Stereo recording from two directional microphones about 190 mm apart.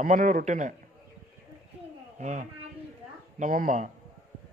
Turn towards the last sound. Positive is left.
turn(degrees=-45)  # may be behind; listen again after turning